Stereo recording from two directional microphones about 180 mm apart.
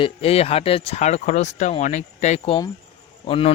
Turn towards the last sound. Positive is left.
turn(degrees=30)  # may be behind; listen again after turning